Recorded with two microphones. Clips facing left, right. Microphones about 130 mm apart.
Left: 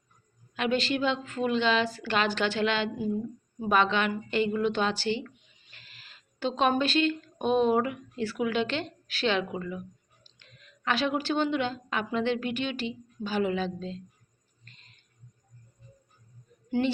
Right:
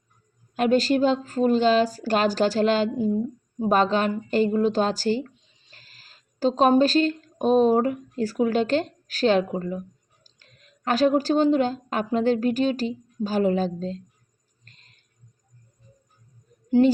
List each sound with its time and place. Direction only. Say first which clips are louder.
0.5 s a woman's voice: right 8 dB; 40° right (ahead or behind)
14.6 s a sound: even; 40° right (ahead or behind)
16.6 s speech: right 9 dB; 35° right (ahead or behind)